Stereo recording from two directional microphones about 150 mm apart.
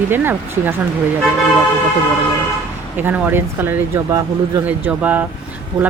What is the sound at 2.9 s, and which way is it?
Speech, 10° right (ahead or behind).